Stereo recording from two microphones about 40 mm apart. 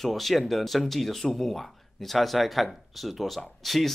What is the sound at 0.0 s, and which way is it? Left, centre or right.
Speech, centre.